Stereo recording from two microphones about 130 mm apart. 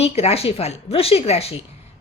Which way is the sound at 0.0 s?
50° left (ahead or behind).